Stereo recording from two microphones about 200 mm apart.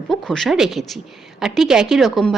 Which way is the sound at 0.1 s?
Centre (ahead or behind).